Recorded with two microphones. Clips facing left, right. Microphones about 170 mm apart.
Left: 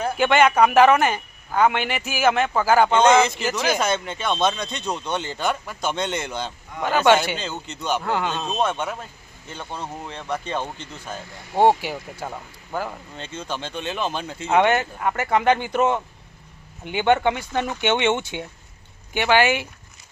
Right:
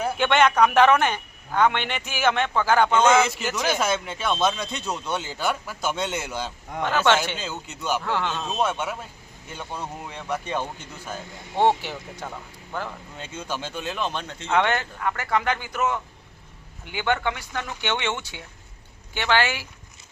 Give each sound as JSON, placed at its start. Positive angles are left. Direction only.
{"t": 0.2, "sound": "speech", "side_deg": 5}
{"t": 2.9, "sound": "speech", "side_deg": -5}
{"t": 6.8, "sound": "speech", "side_deg": 10}
{"t": 7.3, "sound": "speech", "side_deg": -5}
{"t": 8.0, "sound": "speech", "side_deg": 10}
{"t": 8.4, "sound": "speech", "side_deg": -5}
{"t": 11.6, "sound": "speech", "side_deg": 10}
{"t": 13.1, "sound": "speech", "side_deg": -10}